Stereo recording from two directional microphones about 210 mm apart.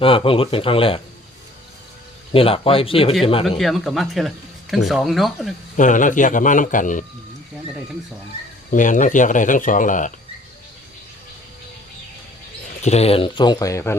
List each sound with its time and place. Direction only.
0.0 s speech: 25° left (ahead or behind)
2.3 s speech: 25° left (ahead or behind)
3.6 s speech: centre (ahead or behind)
5.7 s speech: 35° left (ahead or behind)
8.7 s speech: 35° left (ahead or behind)
12.8 s speech: 30° left (ahead or behind); by 13.9 s 15° left (ahead or behind)